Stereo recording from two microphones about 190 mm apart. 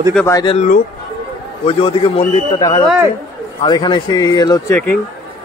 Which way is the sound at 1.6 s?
30° left (ahead or behind).